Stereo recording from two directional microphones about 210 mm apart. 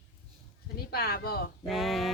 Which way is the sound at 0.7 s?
50° left (ahead or behind).